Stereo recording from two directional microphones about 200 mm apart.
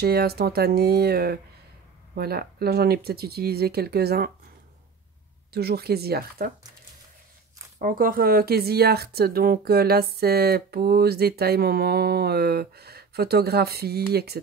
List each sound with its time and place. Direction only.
0.0 s speech: 50° right (ahead or behind)
5.5 s speech: 50° right (ahead or behind)
7.8 s speech: 45° right (ahead or behind)